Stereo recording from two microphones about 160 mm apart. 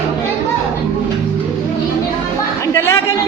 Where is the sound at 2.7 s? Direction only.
15° left (ahead or behind).